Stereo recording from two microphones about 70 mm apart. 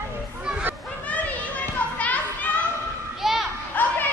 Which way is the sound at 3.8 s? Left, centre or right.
Left.